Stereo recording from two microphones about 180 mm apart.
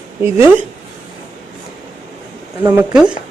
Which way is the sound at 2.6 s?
15° right (ahead or behind).